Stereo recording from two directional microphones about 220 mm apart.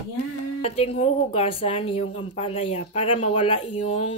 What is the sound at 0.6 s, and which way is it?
A woman's voice, 25° left (ahead or behind).